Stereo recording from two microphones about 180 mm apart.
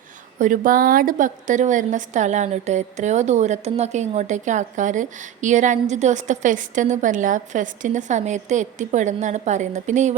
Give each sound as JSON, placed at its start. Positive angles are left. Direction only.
{"t": 0.3, "sound": "a woman's voice", "side_deg": -45}